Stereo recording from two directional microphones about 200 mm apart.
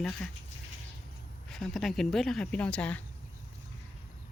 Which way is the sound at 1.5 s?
Centre (ahead or behind).